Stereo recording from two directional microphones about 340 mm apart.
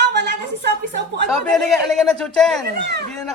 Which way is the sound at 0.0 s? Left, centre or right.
Right.